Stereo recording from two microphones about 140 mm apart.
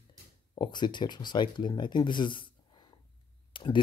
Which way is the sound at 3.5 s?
35° left (ahead or behind).